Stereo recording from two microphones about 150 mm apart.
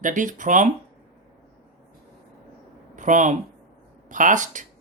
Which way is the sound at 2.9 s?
55° right (ahead or behind).